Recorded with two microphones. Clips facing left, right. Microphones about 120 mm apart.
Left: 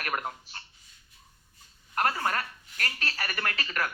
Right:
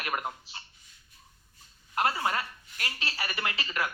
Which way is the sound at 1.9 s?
15° right (ahead or behind).